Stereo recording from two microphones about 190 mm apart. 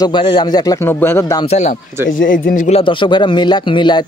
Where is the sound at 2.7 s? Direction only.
25° left (ahead or behind).